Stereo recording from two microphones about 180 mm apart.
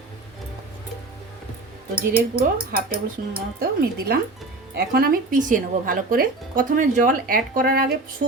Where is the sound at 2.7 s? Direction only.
55° right (ahead or behind).